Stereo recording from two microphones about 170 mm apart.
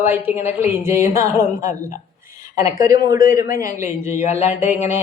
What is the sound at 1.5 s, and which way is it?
Speech, 50° left (ahead or behind).